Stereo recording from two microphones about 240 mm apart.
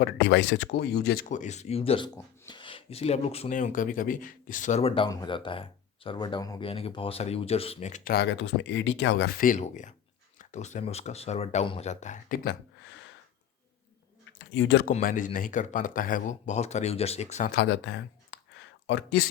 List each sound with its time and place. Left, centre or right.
0.0 s speech: left
9.4 s speech: left
12.9 s a sound: left
14.3 s speech: left
14.8 s speech: left
17.5 s a sound: left